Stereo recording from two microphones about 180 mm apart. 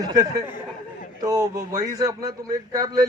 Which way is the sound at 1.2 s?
20° right (ahead or behind).